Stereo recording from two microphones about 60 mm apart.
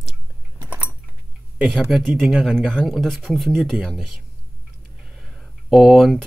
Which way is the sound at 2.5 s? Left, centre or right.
Centre.